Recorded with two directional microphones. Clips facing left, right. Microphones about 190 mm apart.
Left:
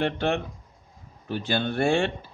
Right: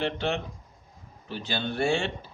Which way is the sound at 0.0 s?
55° left (ahead or behind).